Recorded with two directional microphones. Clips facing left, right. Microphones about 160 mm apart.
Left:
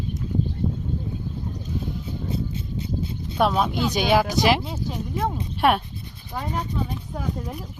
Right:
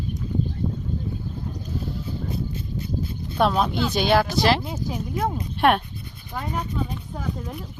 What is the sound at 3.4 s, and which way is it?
Speech, 5° left (ahead or behind).